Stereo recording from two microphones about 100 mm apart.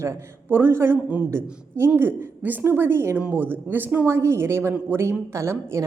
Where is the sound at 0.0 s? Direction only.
25° right (ahead or behind).